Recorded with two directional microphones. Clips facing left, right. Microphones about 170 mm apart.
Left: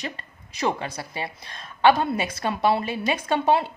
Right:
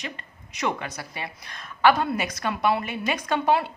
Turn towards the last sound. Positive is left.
turn(degrees=25)  # may be behind; listen again after turning